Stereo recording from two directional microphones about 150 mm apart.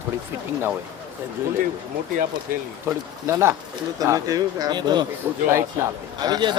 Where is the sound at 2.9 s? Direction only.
20° right (ahead or behind).